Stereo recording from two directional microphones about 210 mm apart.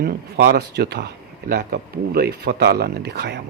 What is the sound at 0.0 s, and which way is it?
A man's voice, 50° right (ahead or behind).